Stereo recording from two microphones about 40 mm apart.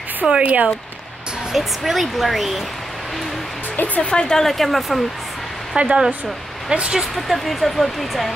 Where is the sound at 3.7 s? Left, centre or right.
Left.